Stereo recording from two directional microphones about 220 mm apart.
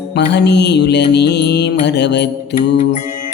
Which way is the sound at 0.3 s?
50° left (ahead or behind).